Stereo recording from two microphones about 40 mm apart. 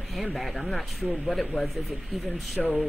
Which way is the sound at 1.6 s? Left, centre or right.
Left.